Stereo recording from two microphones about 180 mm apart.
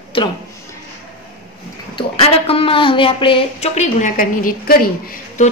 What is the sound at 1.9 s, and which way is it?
Speech, 30° left (ahead or behind).